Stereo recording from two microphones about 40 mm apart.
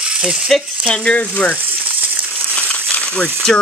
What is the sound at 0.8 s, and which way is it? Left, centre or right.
Stir, left.